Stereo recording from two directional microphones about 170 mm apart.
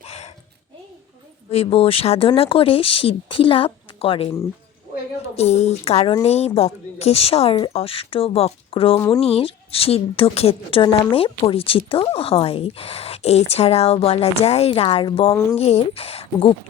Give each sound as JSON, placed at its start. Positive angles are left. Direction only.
{"t": 0.0, "sound": "a sound", "side_deg": 40}
{"t": 1.5, "sound": "a woman's voice", "side_deg": 35}
{"t": 5.4, "sound": "a woman's voice", "side_deg": 40}
{"t": 9.0, "sound": "speech", "side_deg": 15}
{"t": 9.2, "sound": "a woman's voice", "side_deg": 35}
{"t": 15.3, "sound": "speech", "side_deg": 15}
{"t": 15.5, "sound": "a woman's voice", "side_deg": 35}